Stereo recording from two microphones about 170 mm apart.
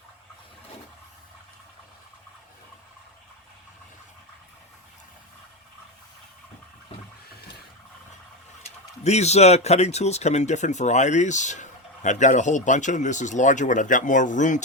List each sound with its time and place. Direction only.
9.0 s speech: 40° left (ahead or behind)